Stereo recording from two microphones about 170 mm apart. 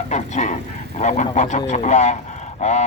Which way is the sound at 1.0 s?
45° left (ahead or behind).